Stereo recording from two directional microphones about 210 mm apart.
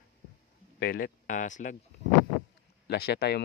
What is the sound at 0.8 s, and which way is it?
Speech, 45° left (ahead or behind).